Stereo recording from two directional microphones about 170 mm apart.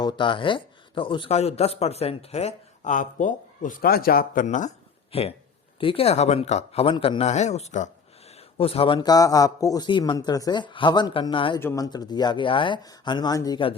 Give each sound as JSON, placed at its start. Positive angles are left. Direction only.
{"t": 0.0, "sound": "speech", "side_deg": 25}
{"t": 5.1, "sound": "a man's voice", "side_deg": 35}
{"t": 11.6, "sound": "a man's voice", "side_deg": 20}